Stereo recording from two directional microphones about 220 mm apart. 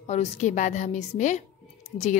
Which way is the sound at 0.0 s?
30° left (ahead or behind).